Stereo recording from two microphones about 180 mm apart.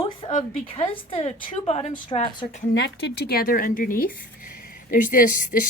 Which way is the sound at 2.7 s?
70° left (ahead or behind).